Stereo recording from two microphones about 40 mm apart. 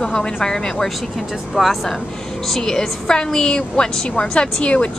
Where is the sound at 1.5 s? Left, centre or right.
Centre.